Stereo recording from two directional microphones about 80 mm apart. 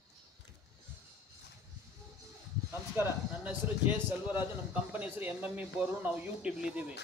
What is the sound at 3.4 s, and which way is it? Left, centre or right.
A man's voice, right.